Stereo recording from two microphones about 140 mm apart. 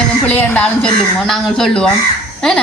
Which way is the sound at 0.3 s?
10° left (ahead or behind).